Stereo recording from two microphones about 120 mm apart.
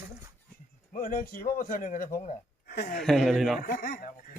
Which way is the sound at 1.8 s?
85° left.